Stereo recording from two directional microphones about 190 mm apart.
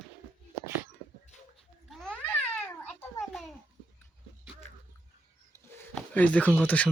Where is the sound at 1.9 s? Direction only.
5° left (ahead or behind).